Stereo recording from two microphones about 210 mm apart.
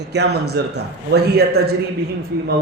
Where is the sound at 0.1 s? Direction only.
50° right (ahead or behind).